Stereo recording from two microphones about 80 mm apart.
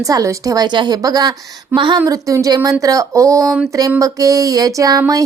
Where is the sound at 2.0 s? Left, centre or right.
Right.